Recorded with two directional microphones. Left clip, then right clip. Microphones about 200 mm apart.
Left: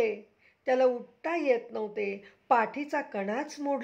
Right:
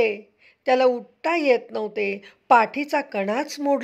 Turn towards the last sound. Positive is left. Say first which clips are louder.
# right 9 dB
turn(degrees=-25)  # may be behind; listen again after turning